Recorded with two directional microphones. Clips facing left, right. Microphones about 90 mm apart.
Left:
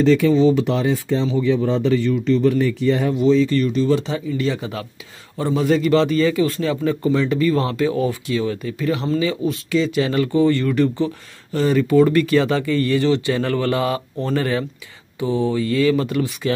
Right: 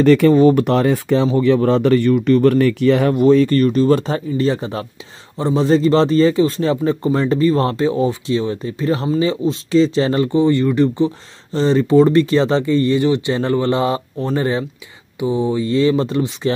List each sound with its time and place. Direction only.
0.0 s a man's voice: 60° right (ahead or behind); by 16.5 s 25° right (ahead or behind)